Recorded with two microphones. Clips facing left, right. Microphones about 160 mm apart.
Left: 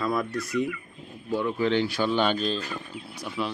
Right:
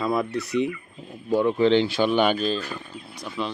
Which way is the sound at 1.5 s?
30° right (ahead or behind).